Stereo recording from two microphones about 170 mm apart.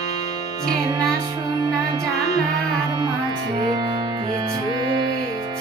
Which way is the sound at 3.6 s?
25° right (ahead or behind).